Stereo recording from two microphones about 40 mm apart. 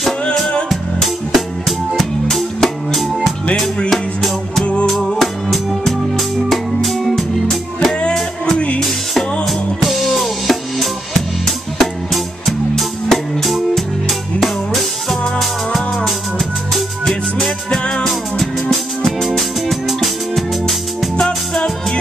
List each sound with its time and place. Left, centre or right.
0.7 s music: centre
9.5 s drum kit: centre
11.8 s music: centre
18.0 s music: centre
21.2 s music: centre